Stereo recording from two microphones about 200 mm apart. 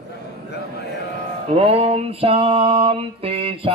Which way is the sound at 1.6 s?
30° right (ahead or behind).